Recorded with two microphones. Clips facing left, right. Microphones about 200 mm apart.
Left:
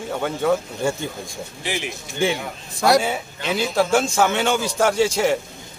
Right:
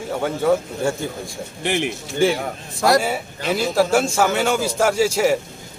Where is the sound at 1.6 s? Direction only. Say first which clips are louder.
Right 6 dB; 60° right (ahead or behind).